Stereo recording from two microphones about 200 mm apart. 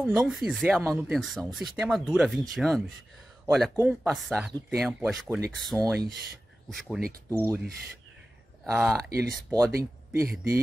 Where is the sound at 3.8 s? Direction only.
5° right (ahead or behind).